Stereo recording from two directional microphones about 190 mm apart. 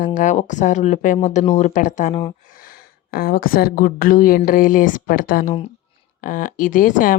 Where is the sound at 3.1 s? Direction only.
50° left (ahead or behind).